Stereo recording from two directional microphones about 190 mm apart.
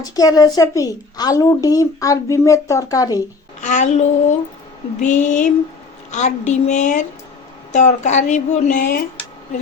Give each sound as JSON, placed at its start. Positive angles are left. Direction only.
{"t": 0.0, "sound": "speech", "side_deg": 20}
{"t": 3.6, "sound": "speech", "side_deg": 40}